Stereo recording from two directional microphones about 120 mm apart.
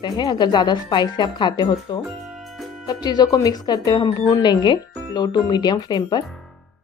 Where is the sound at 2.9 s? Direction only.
35° left (ahead or behind).